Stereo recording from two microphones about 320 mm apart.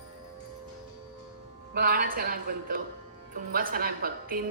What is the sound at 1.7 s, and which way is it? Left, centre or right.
A woman's voice, right.